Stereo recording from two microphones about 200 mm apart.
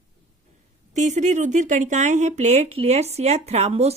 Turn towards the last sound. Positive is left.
turn(degrees=-30)  # may be behind; listen again after turning